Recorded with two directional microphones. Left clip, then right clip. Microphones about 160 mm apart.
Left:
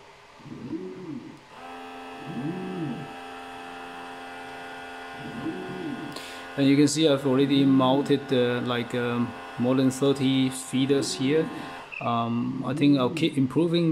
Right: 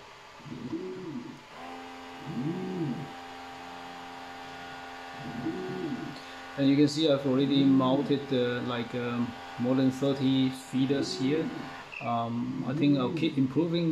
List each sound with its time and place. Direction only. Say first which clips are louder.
6.6 s speech: left 4 dB; 60° left (ahead or behind)